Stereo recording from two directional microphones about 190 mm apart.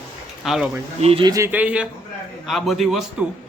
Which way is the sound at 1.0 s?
30° right (ahead or behind).